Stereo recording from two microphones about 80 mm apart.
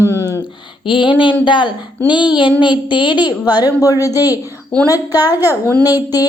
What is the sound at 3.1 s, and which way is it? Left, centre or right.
Speech, centre.